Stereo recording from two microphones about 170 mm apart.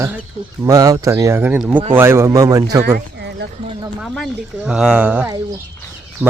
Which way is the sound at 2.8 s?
70° right (ahead or behind).